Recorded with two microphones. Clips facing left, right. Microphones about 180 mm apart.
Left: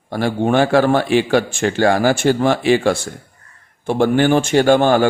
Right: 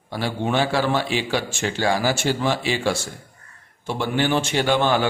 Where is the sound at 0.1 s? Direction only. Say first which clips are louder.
Left 7 dB; 50° left (ahead or behind).